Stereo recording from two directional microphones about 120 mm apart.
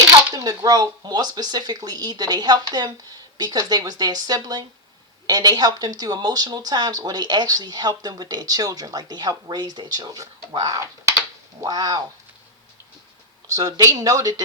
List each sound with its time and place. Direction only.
0.3 s speech: 30° right (ahead or behind)
13.5 s speech: 30° right (ahead or behind)